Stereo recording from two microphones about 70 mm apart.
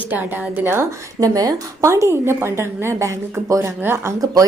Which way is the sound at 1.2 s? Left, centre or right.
Right.